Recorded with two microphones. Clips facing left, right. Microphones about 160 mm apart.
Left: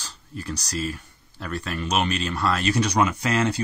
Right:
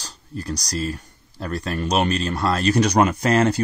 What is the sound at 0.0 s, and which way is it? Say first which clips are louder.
Speech: right 3 dB; 40° right (ahead or behind).